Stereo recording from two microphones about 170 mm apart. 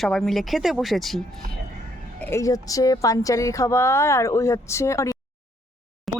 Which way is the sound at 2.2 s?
15° left (ahead or behind).